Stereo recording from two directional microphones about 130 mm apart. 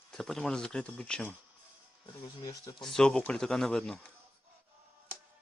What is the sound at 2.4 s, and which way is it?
Speech, 30° left (ahead or behind).